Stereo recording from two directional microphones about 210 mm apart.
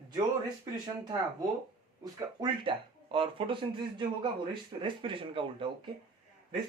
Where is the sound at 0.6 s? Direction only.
20° right (ahead or behind).